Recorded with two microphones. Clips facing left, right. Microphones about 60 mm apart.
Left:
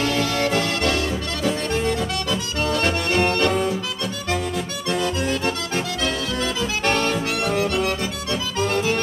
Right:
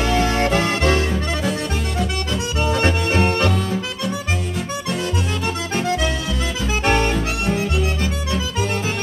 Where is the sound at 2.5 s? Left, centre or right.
Right.